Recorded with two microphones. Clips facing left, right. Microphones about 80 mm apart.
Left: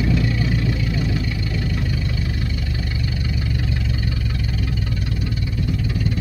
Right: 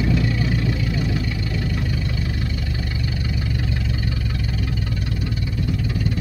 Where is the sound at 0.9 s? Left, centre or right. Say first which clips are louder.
Even; centre.